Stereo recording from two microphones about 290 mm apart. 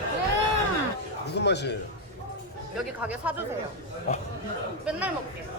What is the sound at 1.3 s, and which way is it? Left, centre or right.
Speech, left.